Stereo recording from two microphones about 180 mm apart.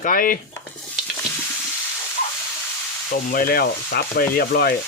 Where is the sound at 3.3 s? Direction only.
55° left (ahead or behind).